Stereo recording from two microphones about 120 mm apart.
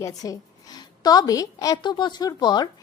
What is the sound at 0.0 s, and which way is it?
A woman's voice, 30° left (ahead or behind).